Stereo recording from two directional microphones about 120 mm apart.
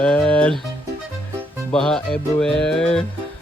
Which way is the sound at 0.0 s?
10° left (ahead or behind).